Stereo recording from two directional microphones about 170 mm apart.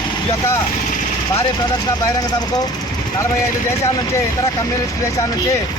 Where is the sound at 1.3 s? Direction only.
20° left (ahead or behind).